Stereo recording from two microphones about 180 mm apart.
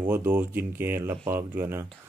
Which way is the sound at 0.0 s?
10° right (ahead or behind).